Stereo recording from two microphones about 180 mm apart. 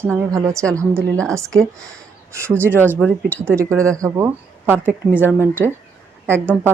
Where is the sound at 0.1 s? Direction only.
15° right (ahead or behind).